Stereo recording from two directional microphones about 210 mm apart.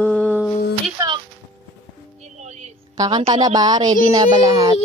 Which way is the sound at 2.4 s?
35° right (ahead or behind).